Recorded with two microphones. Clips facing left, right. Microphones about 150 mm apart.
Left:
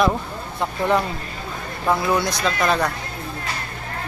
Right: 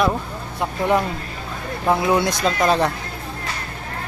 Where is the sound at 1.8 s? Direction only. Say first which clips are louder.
Right 2 dB; 20° right (ahead or behind).